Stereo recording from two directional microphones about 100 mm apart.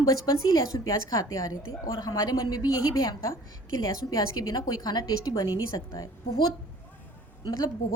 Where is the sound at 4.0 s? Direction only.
40° left (ahead or behind).